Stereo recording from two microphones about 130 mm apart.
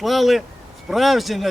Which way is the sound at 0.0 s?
Centre (ahead or behind).